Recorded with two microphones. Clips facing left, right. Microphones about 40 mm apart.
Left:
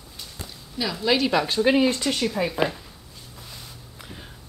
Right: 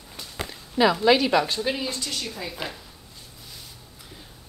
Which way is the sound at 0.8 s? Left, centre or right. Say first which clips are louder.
Right 9 dB; right.